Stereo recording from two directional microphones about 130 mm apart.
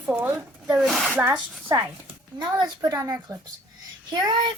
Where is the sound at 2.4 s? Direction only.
30° right (ahead or behind).